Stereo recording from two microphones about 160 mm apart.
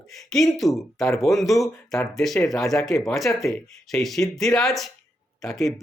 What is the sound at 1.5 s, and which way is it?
Speech, 20° left (ahead or behind).